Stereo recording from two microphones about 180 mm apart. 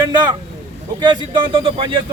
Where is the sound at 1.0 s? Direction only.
25° right (ahead or behind).